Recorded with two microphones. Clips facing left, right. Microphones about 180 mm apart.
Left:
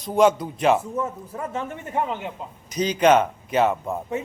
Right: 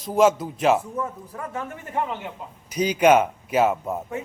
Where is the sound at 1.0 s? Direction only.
25° left (ahead or behind).